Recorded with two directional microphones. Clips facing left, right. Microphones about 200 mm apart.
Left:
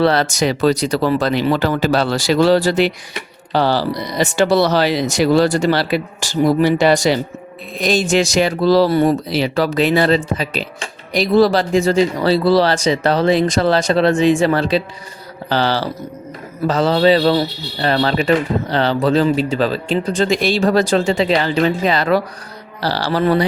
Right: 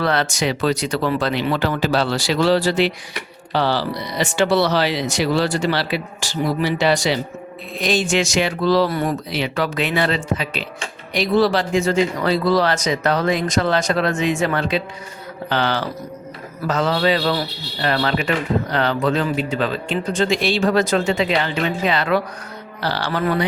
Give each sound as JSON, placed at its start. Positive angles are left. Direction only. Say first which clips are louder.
{"t": 0.0, "sound": "speech", "louder": "left 5 dB", "side_deg": 35}